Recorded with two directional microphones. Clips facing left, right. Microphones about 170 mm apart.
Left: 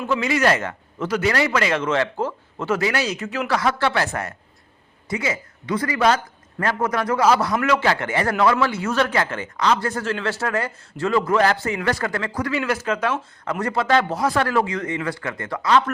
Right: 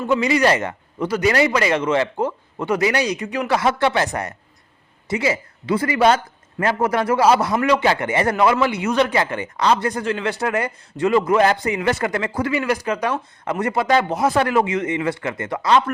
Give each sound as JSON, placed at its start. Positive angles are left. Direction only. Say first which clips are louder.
{"t": 0.2, "sound": "a man's voice", "louder": "right 2 dB", "side_deg": -10}
{"t": 5.0, "sound": "speech", "louder": "right 4 dB", "side_deg": -30}
{"t": 7.5, "sound": "a man's voice", "louder": "right 2 dB", "side_deg": -10}